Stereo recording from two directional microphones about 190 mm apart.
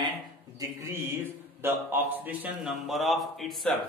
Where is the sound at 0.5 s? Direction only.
15° right (ahead or behind); by 3.8 s centre (ahead or behind).